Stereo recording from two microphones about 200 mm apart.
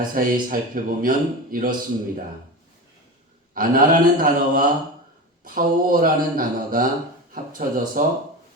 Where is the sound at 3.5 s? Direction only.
45° right (ahead or behind).